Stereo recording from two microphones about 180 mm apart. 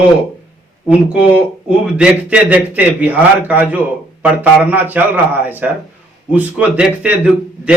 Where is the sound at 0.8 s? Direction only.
5° right (ahead or behind).